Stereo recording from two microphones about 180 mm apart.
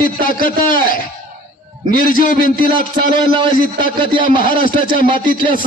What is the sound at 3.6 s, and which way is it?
A man's voice, 50° left (ahead or behind).